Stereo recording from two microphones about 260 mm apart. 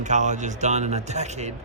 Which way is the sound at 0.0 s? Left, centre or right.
Right.